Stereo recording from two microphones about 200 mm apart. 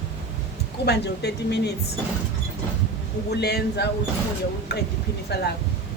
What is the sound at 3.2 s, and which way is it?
A woman's voice, 55° left (ahead or behind).